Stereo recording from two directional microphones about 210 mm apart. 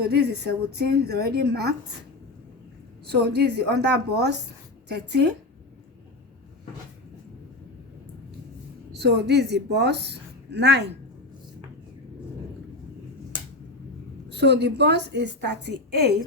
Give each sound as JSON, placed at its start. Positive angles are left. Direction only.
{"t": 0.0, "sound": "a woman's voice", "side_deg": -50}
{"t": 3.1, "sound": "a woman's voice", "side_deg": -50}
{"t": 8.9, "sound": "a woman's voice", "side_deg": -55}
{"t": 14.3, "sound": "a woman's voice", "side_deg": -55}